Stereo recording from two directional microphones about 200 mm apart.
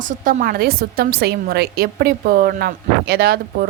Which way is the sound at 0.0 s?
40° right (ahead or behind).